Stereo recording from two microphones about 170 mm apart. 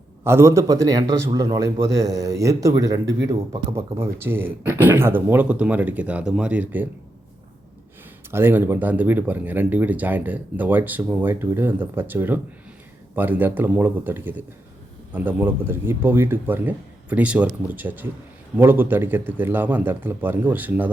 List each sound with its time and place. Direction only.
0.3 s speech: 15° right (ahead or behind)
8.3 s speech: 15° right (ahead or behind)